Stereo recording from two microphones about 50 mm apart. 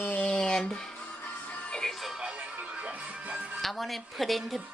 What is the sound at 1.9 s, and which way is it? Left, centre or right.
Music, centre.